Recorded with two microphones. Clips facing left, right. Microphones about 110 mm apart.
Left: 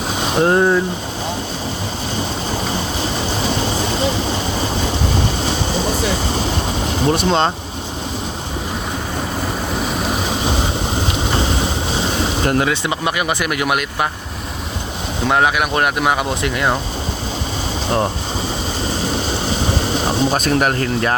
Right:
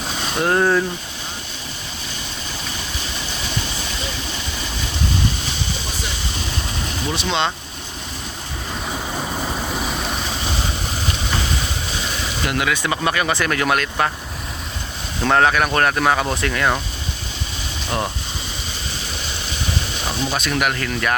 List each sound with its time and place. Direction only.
0.2 s speech: 25° left (ahead or behind)
3.4 s vehicle: 40° left (ahead or behind)
7.0 s speech: 45° left (ahead or behind)
11.3 s vehicle: 30° left (ahead or behind)
15.3 s speech: 10° left (ahead or behind)
20.1 s speech: 40° left (ahead or behind)